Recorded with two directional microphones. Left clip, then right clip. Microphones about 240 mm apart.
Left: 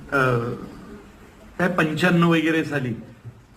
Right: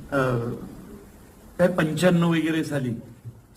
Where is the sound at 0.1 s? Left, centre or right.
Right.